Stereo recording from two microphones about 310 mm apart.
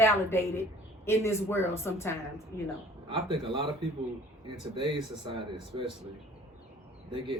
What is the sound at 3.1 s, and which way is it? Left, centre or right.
Speech, centre.